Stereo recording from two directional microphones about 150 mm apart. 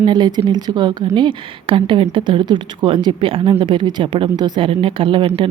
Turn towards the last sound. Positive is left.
turn(degrees=-35)  # may be behind; listen again after turning